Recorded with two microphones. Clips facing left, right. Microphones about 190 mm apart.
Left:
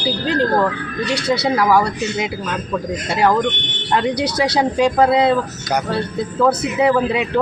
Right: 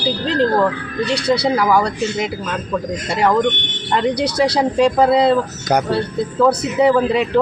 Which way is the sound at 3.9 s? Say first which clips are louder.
Right 1 dB; centre (ahead or behind).